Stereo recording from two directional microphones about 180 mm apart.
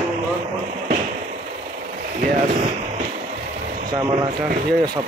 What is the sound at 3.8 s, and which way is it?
Speech, 25° right (ahead or behind).